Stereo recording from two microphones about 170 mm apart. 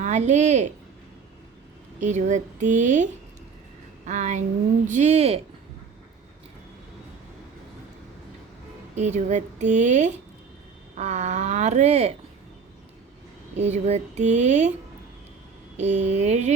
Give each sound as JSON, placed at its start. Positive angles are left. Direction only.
{"t": 0.0, "sound": "speech", "side_deg": -45}
{"t": 2.0, "sound": "speech", "side_deg": -45}
{"t": 9.0, "sound": "speech", "side_deg": -45}
{"t": 13.6, "sound": "speech", "side_deg": -40}
{"t": 15.8, "sound": "speech", "side_deg": -40}